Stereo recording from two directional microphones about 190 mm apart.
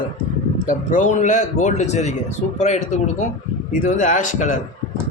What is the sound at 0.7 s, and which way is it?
A man's voice, 40° left (ahead or behind).